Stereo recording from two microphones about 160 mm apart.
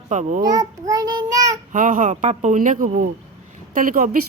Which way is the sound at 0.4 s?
20° right (ahead or behind).